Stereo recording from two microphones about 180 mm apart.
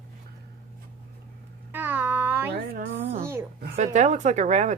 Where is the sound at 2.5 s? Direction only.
60° right (ahead or behind).